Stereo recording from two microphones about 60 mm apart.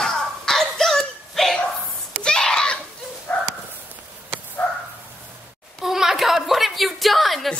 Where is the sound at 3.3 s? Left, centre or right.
Left.